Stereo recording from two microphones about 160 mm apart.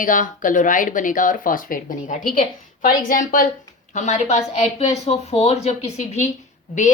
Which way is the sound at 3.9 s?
45° left (ahead or behind).